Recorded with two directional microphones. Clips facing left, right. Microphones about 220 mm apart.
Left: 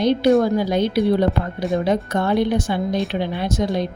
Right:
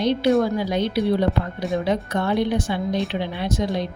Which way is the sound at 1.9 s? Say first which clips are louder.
Left 2 dB; 45° left (ahead or behind).